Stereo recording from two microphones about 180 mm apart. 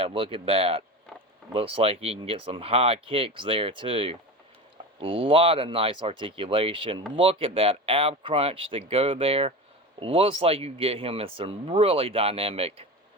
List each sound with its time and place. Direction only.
0.0 s speech: 30° right (ahead or behind)